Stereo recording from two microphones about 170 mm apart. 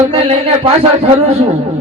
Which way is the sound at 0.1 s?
35° right (ahead or behind).